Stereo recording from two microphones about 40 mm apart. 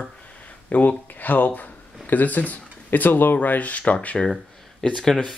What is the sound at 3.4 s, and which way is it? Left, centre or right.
Speech, left.